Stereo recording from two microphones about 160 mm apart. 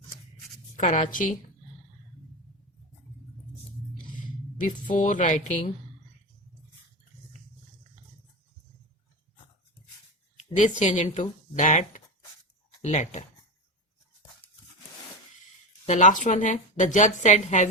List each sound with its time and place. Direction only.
0.8 s a woman's voice: 50° left (ahead or behind)
4.6 s a woman's voice: 55° left (ahead or behind)
10.6 s a woman's voice: 50° left (ahead or behind)
15.9 s a woman's voice: 50° left (ahead or behind)